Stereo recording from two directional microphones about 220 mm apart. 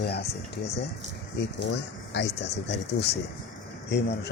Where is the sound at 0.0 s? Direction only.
45° left (ahead or behind).